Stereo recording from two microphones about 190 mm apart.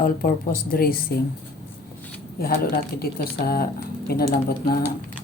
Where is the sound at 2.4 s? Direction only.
50° left (ahead or behind).